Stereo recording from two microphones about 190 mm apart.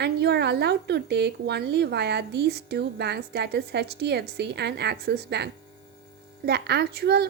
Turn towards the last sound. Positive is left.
turn(degrees=-60)  # may be behind; listen again after turning